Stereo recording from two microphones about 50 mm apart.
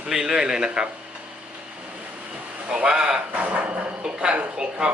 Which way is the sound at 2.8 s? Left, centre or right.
Centre.